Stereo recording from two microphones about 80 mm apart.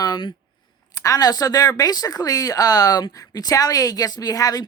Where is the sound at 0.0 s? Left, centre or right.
Left.